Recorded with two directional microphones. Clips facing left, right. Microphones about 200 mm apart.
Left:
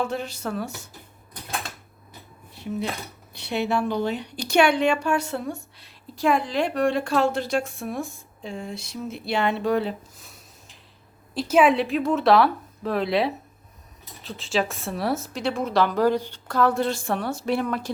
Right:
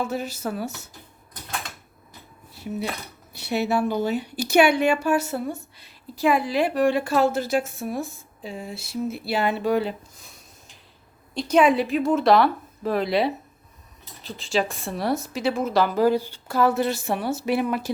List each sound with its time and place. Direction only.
0.0 s a woman's voice: 5° right (ahead or behind)
2.6 s a woman's voice: 5° right (ahead or behind)